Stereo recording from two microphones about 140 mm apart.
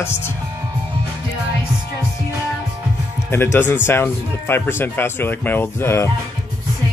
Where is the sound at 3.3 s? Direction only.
15° left (ahead or behind).